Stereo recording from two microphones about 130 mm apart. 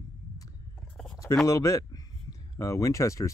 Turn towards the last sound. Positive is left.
turn(degrees=25)  # may be behind; listen again after turning